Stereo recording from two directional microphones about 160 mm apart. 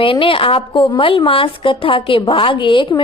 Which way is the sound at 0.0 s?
35° left (ahead or behind).